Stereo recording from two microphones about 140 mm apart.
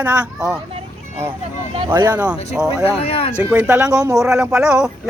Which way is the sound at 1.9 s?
30° right (ahead or behind).